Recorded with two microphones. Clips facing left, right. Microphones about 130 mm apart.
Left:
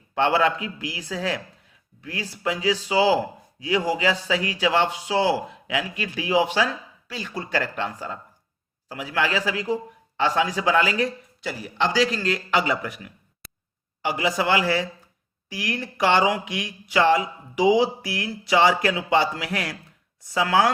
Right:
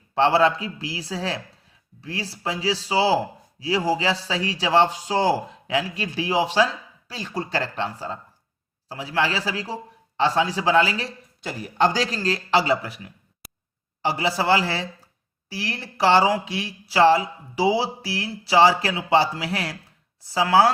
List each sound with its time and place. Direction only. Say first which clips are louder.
0.1 s a man's voice: right 2 dB; 35° right (ahead or behind)